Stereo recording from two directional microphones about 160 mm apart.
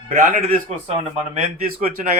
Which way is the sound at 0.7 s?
40° right (ahead or behind).